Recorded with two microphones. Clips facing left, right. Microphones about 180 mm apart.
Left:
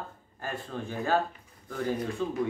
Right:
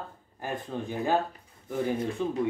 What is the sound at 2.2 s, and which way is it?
Speech, 15° right (ahead or behind).